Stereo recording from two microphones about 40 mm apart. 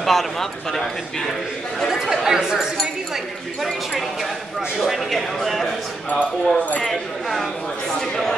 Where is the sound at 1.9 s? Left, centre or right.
Centre.